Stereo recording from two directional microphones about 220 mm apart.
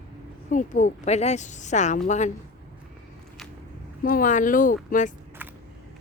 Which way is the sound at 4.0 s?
40° left (ahead or behind).